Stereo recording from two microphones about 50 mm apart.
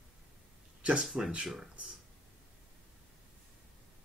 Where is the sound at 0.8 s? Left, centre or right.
Right.